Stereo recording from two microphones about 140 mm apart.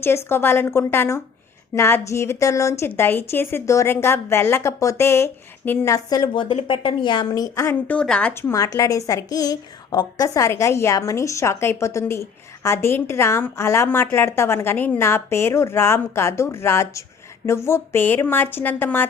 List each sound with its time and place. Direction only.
0.3 s a woman's voice: 15° left (ahead or behind)
8.3 s a woman's voice: 15° left (ahead or behind)